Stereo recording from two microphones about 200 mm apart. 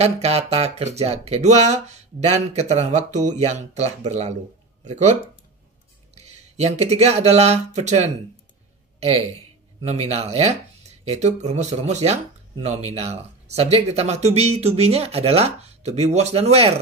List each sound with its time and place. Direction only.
0.0 s speech: 30° right (ahead or behind)
6.1 s speech: 35° right (ahead or behind)